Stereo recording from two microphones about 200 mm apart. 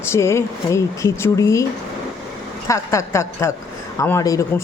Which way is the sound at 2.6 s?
15° left (ahead or behind).